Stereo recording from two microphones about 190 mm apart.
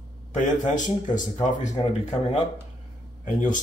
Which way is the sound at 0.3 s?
40° left (ahead or behind).